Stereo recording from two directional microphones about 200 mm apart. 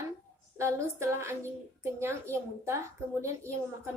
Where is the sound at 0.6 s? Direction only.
15° right (ahead or behind).